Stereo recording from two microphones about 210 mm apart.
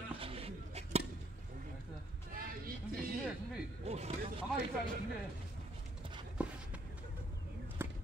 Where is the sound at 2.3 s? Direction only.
40° right (ahead or behind).